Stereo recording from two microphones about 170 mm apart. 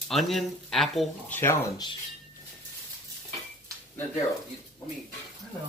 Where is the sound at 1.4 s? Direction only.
15° left (ahead or behind).